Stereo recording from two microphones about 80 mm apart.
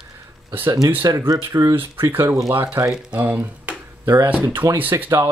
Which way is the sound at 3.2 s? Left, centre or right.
Right.